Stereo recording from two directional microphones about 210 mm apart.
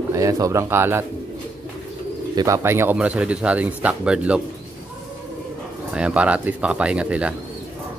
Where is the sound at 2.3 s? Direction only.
15° right (ahead or behind).